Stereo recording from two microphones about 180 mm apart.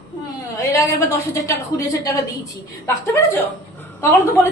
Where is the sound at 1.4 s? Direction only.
15° left (ahead or behind).